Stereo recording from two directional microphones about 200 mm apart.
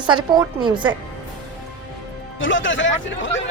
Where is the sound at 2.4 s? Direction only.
70° left (ahead or behind).